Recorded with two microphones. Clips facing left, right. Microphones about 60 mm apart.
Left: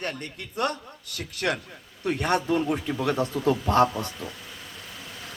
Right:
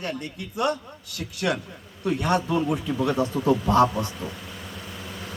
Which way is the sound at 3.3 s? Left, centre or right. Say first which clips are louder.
Right 3 dB; right.